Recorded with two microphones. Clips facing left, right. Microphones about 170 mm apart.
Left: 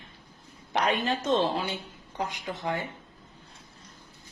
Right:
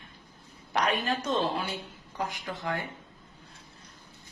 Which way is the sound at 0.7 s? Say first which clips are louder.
Left 1 dB; 20° left (ahead or behind).